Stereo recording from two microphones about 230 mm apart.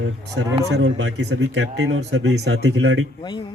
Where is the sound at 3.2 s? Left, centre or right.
Left.